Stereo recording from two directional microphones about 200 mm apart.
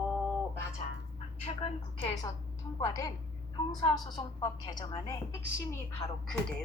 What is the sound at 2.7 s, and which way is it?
A woman's voice, 15° left (ahead or behind).